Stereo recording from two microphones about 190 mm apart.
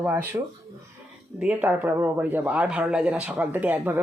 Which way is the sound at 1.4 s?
5° right (ahead or behind).